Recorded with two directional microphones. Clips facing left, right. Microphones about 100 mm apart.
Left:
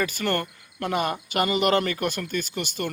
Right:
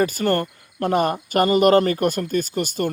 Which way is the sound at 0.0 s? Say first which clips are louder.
Right 6 dB; 40° right (ahead or behind).